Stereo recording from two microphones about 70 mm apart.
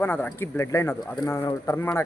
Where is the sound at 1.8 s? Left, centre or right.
Left.